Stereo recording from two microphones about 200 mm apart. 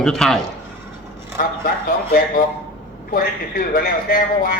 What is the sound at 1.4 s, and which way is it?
Speech, 45° left (ahead or behind).